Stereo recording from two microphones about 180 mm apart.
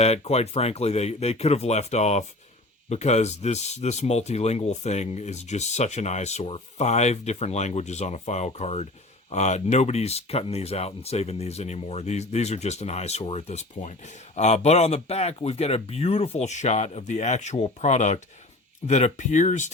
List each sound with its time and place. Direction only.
0.0 s speech: 35° left (ahead or behind)